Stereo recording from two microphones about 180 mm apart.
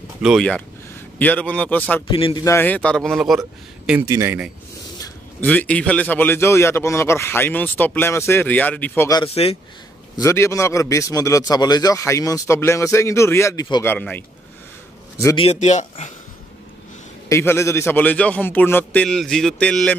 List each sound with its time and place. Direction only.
0.2 s a man's voice: centre (ahead or behind)
2.0 s a man's voice: 25° left (ahead or behind)
2.4 s a man's voice: 10° left (ahead or behind)
4.0 s a man's voice: 15° right (ahead or behind)
5.4 s a man's voice: 10° left (ahead or behind)
9.2 s speech: 30° left (ahead or behind)
10.1 s a man's voice: 15° left (ahead or behind)
13.9 s a man's voice: 10° left (ahead or behind)
15.3 s speech: 35° left (ahead or behind)
17.3 s a man's voice: 15° left (ahead or behind)